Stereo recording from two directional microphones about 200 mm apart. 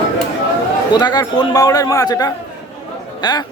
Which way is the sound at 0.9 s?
20° left (ahead or behind).